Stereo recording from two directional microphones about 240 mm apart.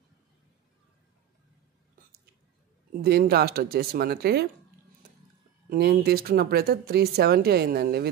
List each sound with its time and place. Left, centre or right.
3.0 s speech: right
5.7 s speech: right